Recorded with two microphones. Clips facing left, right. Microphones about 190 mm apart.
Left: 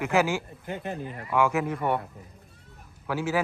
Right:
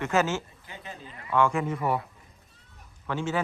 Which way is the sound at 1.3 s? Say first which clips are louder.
Even; 5° left (ahead or behind).